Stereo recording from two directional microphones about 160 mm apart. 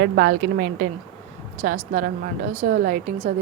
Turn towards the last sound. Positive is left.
turn(degrees=-55)  # may be behind; listen again after turning